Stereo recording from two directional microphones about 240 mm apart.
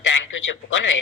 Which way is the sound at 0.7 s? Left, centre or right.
Left.